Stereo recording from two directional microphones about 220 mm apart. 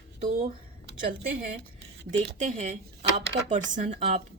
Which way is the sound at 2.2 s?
35° right (ahead or behind).